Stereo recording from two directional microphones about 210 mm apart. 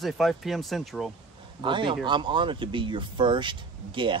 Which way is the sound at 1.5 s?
25° right (ahead or behind).